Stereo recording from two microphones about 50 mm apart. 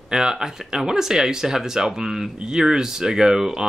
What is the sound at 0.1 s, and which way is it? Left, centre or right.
Speech, centre.